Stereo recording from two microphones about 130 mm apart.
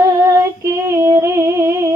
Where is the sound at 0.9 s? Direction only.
25° right (ahead or behind).